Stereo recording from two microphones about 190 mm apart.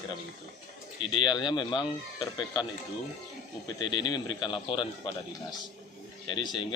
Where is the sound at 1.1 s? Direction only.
25° left (ahead or behind).